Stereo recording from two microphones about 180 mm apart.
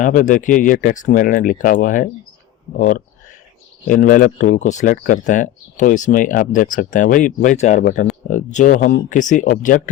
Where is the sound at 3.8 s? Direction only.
50° left (ahead or behind).